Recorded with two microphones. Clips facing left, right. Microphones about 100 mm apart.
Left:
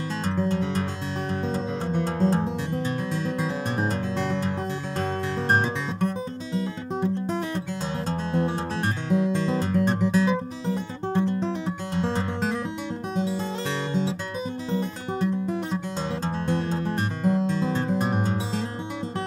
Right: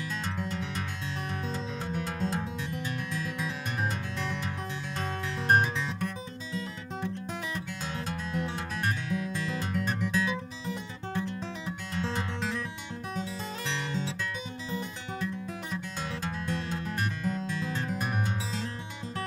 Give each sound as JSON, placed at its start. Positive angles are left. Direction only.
{"t": 0.2, "sound": "music", "side_deg": 30}
{"t": 14.7, "sound": "music", "side_deg": 30}